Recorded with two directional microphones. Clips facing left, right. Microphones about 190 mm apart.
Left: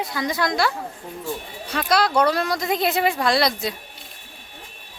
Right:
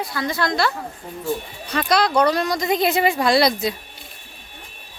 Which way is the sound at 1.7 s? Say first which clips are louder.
Right 1 dB; 5° left (ahead or behind).